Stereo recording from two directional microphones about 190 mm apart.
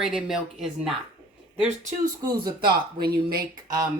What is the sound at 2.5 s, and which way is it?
Speech, 55° right (ahead or behind).